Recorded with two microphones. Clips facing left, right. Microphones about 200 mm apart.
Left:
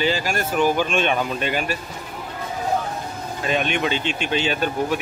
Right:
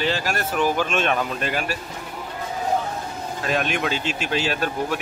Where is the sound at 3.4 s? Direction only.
Centre (ahead or behind).